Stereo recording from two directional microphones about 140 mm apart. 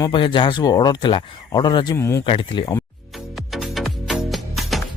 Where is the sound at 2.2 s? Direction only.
35° left (ahead or behind).